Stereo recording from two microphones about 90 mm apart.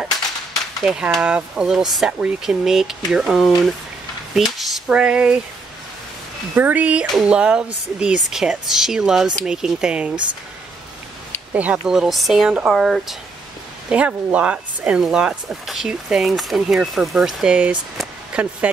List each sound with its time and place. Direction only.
0.8 s speech: 10° right (ahead or behind)
6.5 s speech: 20° right (ahead or behind)
11.5 s speech: 15° right (ahead or behind)
11.9 s speech: 5° right (ahead or behind)
13.8 s speech: 15° right (ahead or behind)